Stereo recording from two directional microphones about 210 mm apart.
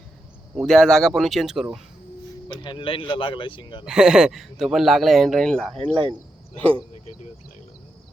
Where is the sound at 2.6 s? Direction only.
25° left (ahead or behind).